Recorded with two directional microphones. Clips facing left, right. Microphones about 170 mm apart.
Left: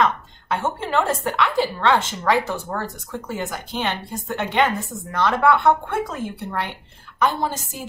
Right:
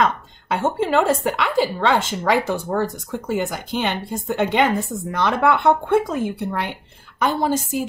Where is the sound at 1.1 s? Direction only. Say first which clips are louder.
Right 2 dB; 10° right (ahead or behind).